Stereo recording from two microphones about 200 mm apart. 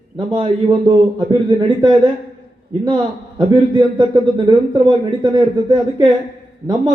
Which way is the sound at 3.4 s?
20° right (ahead or behind).